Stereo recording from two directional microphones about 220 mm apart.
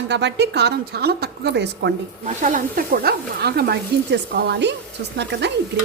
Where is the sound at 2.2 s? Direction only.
35° right (ahead or behind); by 5.5 s 50° right (ahead or behind).